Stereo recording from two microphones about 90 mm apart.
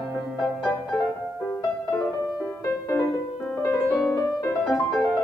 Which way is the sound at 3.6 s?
30° left (ahead or behind).